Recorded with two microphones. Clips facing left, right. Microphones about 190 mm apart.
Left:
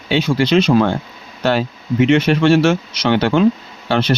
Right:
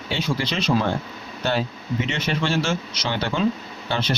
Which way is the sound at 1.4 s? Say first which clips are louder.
Left 7 dB; 75° left (ahead or behind).